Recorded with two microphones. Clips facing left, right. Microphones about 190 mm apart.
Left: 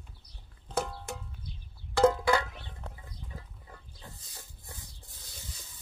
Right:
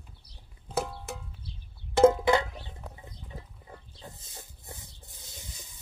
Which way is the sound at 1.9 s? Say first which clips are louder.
Right 4 dB; 20° right (ahead or behind).